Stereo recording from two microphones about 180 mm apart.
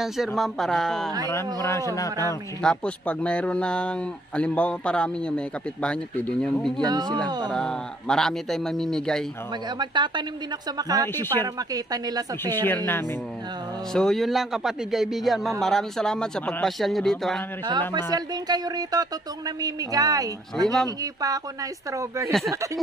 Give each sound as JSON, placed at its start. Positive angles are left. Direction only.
{"t": 0.4, "sound": "a man's voice", "side_deg": 0}
{"t": 1.3, "sound": "speech", "side_deg": 15}
{"t": 2.6, "sound": "a man's voice", "side_deg": 5}
{"t": 6.8, "sound": "speech", "side_deg": -20}
{"t": 7.5, "sound": "a man's voice", "side_deg": 5}
{"t": 9.8, "sound": "speech", "side_deg": -25}
{"t": 12.6, "sound": "a man's voice", "side_deg": 10}
{"t": 17.6, "sound": "speech", "side_deg": -25}